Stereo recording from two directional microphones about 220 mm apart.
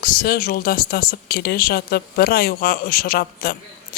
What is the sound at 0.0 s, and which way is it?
Speech, 40° left (ahead or behind).